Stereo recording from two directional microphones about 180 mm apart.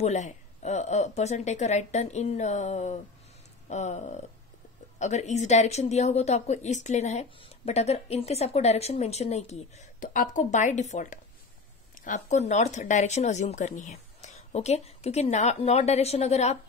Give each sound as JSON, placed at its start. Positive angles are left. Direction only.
{"t": 0.0, "sound": "a woman's voice", "side_deg": 40}